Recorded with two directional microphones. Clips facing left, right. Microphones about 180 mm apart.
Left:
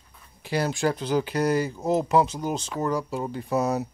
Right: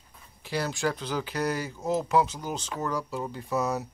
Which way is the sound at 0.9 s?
15° left (ahead or behind).